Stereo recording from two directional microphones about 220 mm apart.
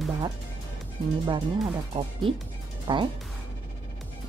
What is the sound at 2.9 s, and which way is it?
Speech, 15° right (ahead or behind).